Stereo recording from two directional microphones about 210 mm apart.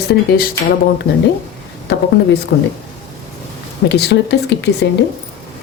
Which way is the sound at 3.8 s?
55° left (ahead or behind).